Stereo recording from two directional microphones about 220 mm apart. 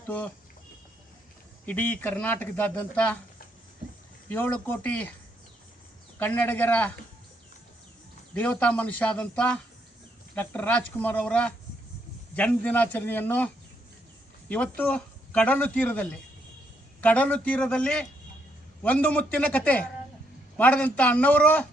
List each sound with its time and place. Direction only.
1.6 s speech: 10° left (ahead or behind)
4.3 s speech: 10° left (ahead or behind)
6.1 s speech: 10° left (ahead or behind)
8.3 s speech: 5° left (ahead or behind)
14.8 s speech: 5° left (ahead or behind)